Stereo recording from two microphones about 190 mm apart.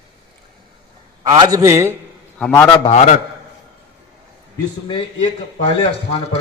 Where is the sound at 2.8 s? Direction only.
35° left (ahead or behind).